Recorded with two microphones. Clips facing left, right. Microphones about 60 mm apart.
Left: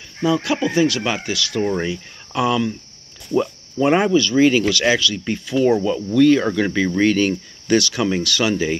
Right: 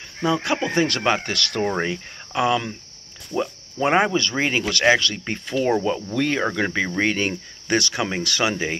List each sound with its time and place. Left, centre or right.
0.2 s speech: right
2.3 s speech: right
3.8 s speech: right